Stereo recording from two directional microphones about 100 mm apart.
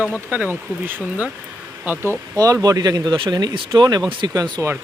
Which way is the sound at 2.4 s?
35° right (ahead or behind).